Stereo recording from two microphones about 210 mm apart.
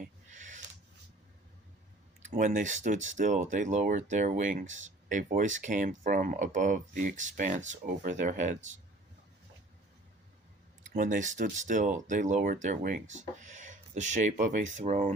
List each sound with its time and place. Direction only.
0.3 s a sound: 35° right (ahead or behind)
2.3 s speech: 35° right (ahead or behind)
10.8 s speech: 40° right (ahead or behind)